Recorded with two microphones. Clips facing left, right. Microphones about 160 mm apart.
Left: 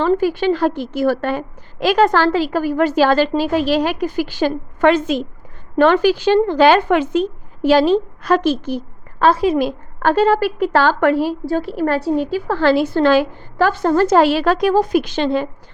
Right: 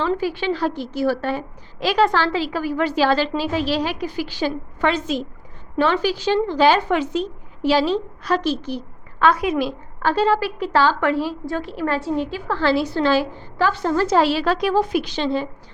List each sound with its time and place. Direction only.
0.0 s a woman's voice: 45° left (ahead or behind); by 9.6 s 30° left (ahead or behind)
9.6 s a woman's voice: 50° left (ahead or behind)
11.3 s a woman's voice: 40° left (ahead or behind); by 15.4 s 55° left (ahead or behind)